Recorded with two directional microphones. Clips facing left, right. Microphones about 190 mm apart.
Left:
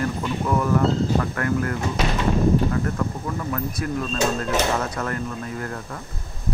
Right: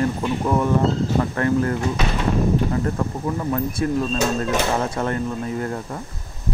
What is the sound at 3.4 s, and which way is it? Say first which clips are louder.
Speech: right 6 dB; 25° right (ahead or behind).